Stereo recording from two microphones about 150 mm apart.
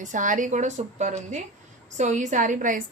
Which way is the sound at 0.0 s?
55° right (ahead or behind).